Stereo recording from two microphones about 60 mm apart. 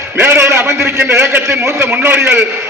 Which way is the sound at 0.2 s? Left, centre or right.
Right.